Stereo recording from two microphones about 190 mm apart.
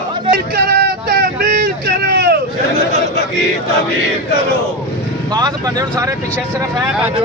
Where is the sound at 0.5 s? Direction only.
55° right (ahead or behind).